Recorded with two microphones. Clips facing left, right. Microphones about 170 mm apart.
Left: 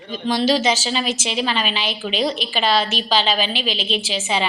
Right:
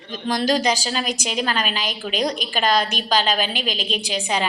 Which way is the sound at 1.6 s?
45° right (ahead or behind).